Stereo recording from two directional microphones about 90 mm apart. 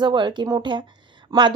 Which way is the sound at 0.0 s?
60° right (ahead or behind).